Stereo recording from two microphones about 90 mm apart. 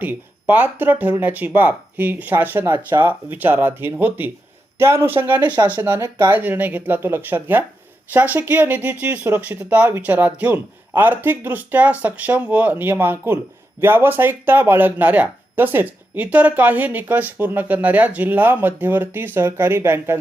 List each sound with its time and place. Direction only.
0.0 s speech: 20° right (ahead or behind)